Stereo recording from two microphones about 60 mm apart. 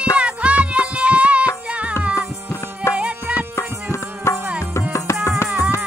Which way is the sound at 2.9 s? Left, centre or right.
Right.